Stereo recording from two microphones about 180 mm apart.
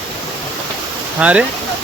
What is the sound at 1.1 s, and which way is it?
Speech, 5° right (ahead or behind).